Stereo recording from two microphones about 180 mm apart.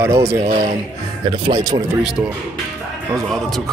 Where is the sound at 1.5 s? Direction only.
20° right (ahead or behind).